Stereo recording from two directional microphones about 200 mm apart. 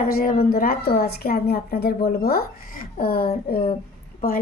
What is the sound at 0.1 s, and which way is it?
A woman's voice, 50° left (ahead or behind).